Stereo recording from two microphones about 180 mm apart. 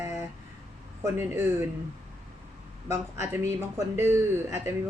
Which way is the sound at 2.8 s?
15° right (ahead or behind).